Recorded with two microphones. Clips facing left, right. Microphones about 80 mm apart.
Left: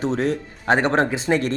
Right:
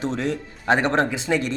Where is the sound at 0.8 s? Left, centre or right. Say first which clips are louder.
Left 1 dB; centre.